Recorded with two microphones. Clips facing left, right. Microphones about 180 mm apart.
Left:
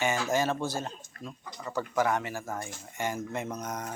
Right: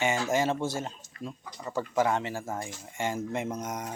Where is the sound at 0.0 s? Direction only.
20° right (ahead or behind).